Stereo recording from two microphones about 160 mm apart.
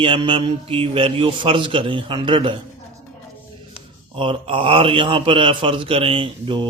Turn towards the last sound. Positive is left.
turn(degrees=-35)  # may be behind; listen again after turning